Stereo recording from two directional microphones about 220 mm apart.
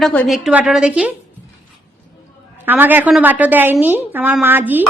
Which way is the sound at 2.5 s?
10° right (ahead or behind).